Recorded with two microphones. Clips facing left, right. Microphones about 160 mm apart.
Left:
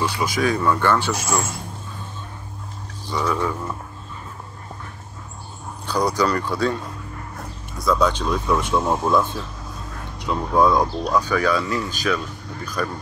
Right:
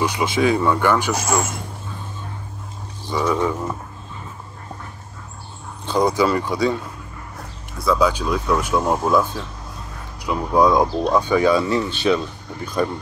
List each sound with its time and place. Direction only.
0.0 s speech: 20° right (ahead or behind)
3.1 s speech: 15° right (ahead or behind)
5.9 s speech: 20° right (ahead or behind)
7.8 s speech: 5° right (ahead or behind)
11.0 s speech: 25° right (ahead or behind)